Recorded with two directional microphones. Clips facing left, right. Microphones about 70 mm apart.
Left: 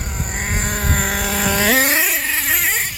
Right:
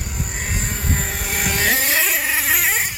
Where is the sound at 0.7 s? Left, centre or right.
Left.